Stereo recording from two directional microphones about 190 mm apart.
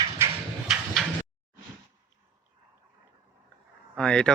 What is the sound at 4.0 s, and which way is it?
Speech, 5° left (ahead or behind).